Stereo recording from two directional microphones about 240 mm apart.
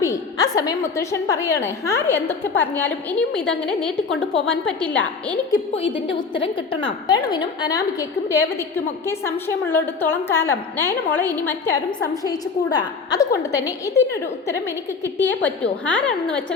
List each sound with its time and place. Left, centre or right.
0.0 s a woman's voice: centre
5.5 s a woman's voice: left; by 16.4 s centre